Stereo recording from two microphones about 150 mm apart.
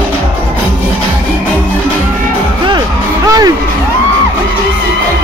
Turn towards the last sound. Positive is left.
turn(degrees=-25)  # may be behind; listen again after turning